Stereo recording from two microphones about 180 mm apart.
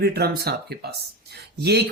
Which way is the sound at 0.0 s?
60° right (ahead or behind).